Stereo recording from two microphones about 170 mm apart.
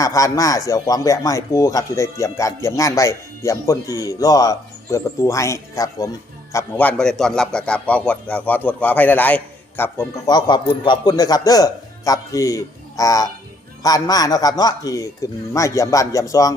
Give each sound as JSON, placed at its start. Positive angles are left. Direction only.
{"t": 0.0, "sound": "a man's voice", "side_deg": 20}